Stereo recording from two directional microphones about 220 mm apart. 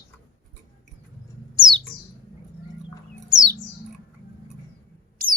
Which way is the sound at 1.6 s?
20° right (ahead or behind).